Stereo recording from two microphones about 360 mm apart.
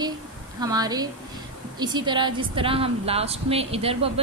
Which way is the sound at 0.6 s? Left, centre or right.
Centre.